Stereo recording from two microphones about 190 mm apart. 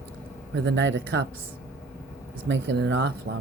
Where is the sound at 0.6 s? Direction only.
70° right (ahead or behind).